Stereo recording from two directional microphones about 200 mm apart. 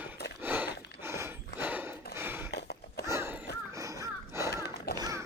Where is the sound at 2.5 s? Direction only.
55° left (ahead or behind).